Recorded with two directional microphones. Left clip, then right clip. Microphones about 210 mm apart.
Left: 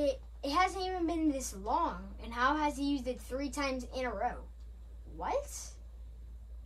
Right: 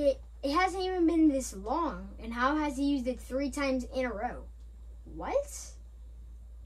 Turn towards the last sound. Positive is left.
turn(degrees=15)  # may be behind; listen again after turning